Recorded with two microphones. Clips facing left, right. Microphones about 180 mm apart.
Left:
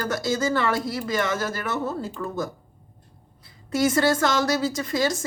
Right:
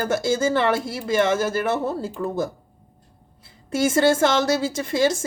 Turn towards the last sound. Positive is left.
turn(degrees=-25)  # may be behind; listen again after turning